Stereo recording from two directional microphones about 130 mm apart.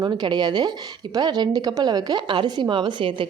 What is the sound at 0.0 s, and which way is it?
A woman's voice, 35° right (ahead or behind).